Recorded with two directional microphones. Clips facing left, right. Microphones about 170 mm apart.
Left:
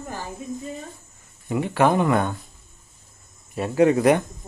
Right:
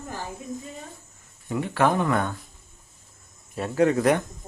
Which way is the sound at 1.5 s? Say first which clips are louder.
Left 3 dB; 15° left (ahead or behind).